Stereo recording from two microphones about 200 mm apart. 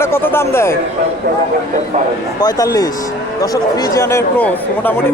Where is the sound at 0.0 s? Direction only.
10° left (ahead or behind).